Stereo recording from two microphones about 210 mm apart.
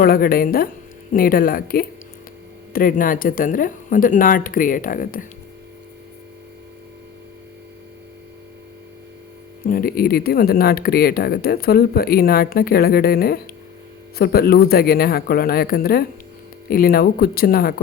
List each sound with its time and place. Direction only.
0.0 s speech: 45° left (ahead or behind)
9.6 s speech: 40° left (ahead or behind)